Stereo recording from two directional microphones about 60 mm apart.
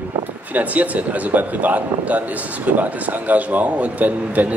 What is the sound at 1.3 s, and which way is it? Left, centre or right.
Speech, right.